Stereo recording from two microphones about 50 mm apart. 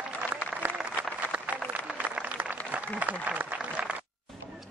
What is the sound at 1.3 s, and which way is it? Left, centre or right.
Applause, right.